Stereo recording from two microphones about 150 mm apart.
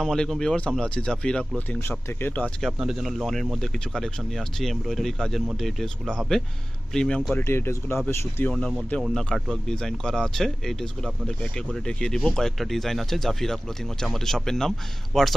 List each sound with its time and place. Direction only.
0.0 s speech: 5° left (ahead or behind)
7.3 s speech: 15° left (ahead or behind)
8.5 s speech: 5° left (ahead or behind)